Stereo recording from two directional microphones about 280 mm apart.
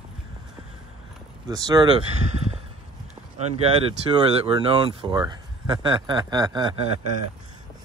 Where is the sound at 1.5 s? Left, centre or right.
Centre.